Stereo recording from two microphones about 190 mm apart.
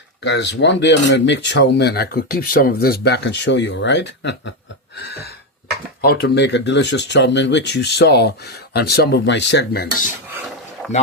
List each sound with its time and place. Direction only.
0.2 s speech: 65° left (ahead or behind)